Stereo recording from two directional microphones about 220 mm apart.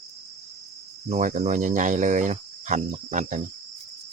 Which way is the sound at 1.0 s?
30° right (ahead or behind).